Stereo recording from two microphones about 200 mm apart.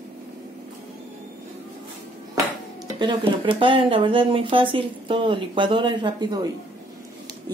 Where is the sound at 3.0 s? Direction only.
25° right (ahead or behind).